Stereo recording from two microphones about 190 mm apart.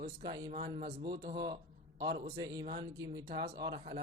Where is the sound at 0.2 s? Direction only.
20° right (ahead or behind).